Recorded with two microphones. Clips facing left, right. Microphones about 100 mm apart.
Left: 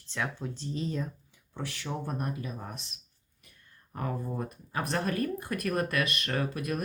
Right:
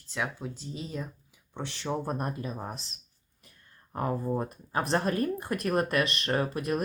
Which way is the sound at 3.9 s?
30° right (ahead or behind).